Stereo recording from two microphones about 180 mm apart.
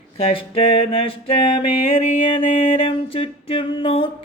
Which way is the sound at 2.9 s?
30° left (ahead or behind).